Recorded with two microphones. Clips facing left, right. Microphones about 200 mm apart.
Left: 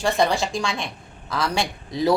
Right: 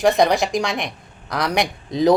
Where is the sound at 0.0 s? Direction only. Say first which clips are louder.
Right 5 dB; 15° right (ahead or behind).